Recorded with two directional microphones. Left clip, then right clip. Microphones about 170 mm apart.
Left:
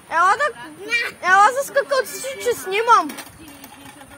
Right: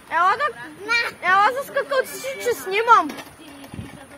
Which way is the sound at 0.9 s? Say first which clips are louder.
Right 1 dB; 35° left (ahead or behind).